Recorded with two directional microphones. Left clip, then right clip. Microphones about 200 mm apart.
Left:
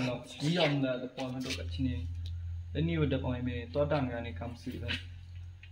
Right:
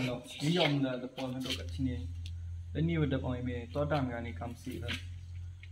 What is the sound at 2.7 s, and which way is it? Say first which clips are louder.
Speech: left 1 dB; 25° left (ahead or behind).